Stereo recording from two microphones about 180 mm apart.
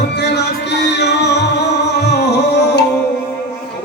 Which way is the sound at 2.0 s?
70° left (ahead or behind).